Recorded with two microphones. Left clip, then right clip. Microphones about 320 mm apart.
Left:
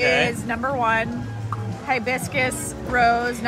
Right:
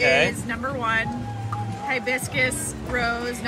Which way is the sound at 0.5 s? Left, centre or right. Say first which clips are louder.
Left 4 dB; left.